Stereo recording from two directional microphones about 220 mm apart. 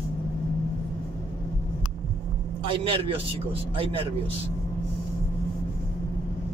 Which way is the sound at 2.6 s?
25° right (ahead or behind).